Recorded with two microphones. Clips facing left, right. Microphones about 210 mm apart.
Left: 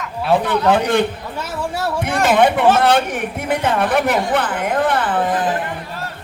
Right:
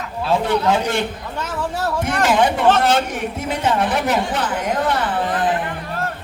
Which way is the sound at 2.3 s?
60° left (ahead or behind).